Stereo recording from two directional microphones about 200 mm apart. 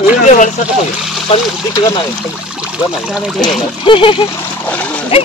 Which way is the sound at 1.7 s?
20° left (ahead or behind).